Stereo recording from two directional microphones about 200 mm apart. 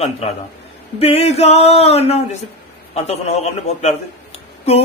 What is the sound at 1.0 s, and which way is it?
Mantra, 30° left (ahead or behind).